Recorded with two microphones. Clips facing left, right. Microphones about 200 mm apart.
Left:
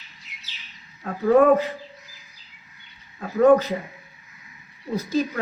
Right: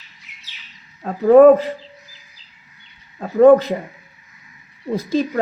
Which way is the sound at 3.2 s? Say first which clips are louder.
Right 7 dB; 35° right (ahead or behind).